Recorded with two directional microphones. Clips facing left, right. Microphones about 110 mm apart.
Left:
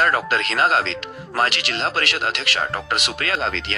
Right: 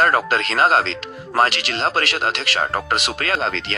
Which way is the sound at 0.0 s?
40° right (ahead or behind).